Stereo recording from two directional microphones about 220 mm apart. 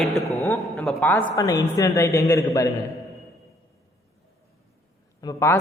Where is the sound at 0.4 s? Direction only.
15° left (ahead or behind).